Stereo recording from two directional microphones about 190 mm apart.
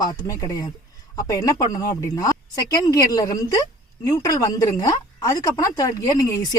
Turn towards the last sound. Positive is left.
turn(degrees=15)  # may be behind; listen again after turning